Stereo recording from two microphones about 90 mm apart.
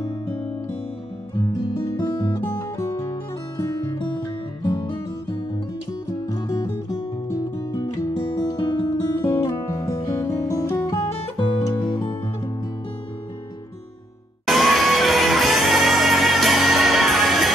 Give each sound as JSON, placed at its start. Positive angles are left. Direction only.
{"t": 1.4, "sound": "music", "side_deg": 35}
{"t": 4.6, "sound": "music", "side_deg": 75}
{"t": 6.3, "sound": "music", "side_deg": 45}
{"t": 8.3, "sound": "music", "side_deg": 65}
{"t": 9.0, "sound": "music", "side_deg": 35}
{"t": 10.9, "sound": "music", "side_deg": 60}
{"t": 14.4, "sound": "music", "side_deg": 0}